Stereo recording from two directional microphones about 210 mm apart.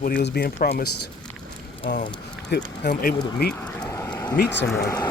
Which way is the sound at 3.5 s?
10° left (ahead or behind).